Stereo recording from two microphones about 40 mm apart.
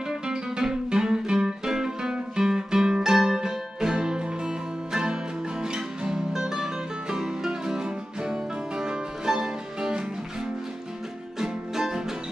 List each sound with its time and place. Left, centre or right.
0.1 s music: centre
11.3 s music: centre